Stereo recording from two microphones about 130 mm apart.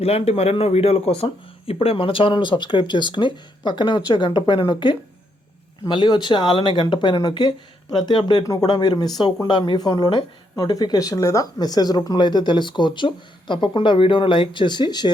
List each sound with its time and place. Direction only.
0.0 s speech: 50° left (ahead or behind); by 15.1 s 35° left (ahead or behind)